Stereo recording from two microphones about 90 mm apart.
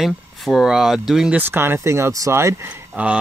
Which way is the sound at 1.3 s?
25° right (ahead or behind).